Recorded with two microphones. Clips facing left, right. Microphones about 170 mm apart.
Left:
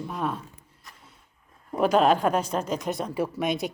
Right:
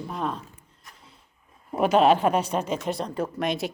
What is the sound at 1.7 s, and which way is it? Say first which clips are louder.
Speech: right 1 dB; 5° right (ahead or behind).